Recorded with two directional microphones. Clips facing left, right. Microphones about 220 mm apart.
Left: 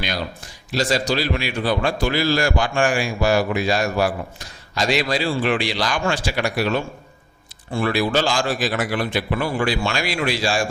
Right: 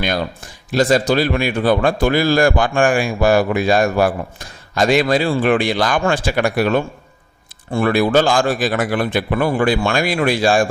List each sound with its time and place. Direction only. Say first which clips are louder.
0.7 s a man's voice: right 6 dB; 55° right (ahead or behind)